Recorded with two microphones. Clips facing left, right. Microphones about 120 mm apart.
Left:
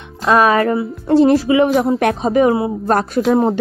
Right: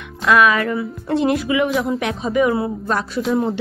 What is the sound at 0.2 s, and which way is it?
Music, 35° left (ahead or behind).